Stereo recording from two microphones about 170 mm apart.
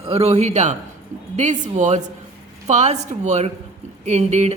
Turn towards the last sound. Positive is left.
turn(degrees=-40)  # may be behind; listen again after turning